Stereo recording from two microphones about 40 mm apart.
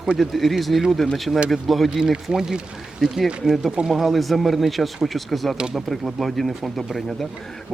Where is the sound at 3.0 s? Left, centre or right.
Centre.